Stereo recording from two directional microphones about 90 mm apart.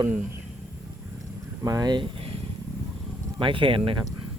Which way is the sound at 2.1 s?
90° right.